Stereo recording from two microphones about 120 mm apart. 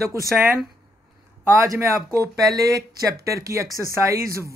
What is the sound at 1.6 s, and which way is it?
Speech, 25° right (ahead or behind).